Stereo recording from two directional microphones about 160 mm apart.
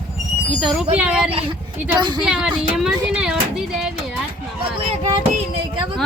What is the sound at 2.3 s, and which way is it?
Child singing, 5° right (ahead or behind).